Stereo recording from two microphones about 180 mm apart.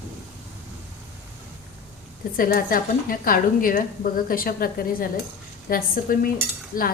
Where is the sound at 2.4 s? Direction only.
50° left (ahead or behind).